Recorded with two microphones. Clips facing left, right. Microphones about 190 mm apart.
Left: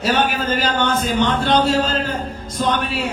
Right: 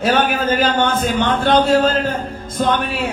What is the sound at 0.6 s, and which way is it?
A man's voice, 50° right (ahead or behind).